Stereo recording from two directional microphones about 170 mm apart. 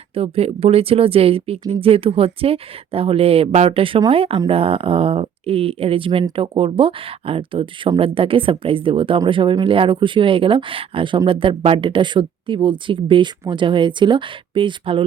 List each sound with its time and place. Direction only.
0.1 s speech: 35° right (ahead or behind)